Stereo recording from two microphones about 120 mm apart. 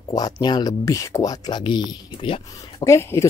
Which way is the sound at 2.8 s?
25° left (ahead or behind).